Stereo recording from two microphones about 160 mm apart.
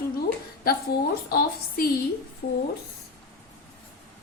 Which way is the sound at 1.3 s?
65° left (ahead or behind).